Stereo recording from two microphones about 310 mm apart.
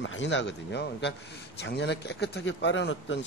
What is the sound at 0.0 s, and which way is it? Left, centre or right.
A man's voice, left.